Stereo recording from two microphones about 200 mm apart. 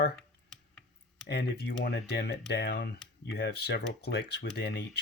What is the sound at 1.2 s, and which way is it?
Speech, 55° left (ahead or behind).